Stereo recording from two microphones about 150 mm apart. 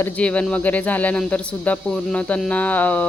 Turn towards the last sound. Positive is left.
turn(degrees=10)  # may be behind; listen again after turning